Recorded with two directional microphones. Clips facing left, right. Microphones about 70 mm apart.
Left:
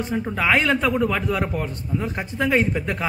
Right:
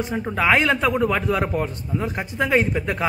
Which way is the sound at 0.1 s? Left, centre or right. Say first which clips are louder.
Right 1 dB; centre.